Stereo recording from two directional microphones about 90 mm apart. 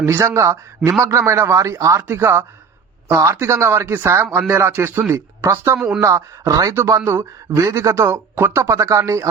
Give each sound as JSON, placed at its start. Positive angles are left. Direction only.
{"t": 0.0, "sound": "speech", "side_deg": -30}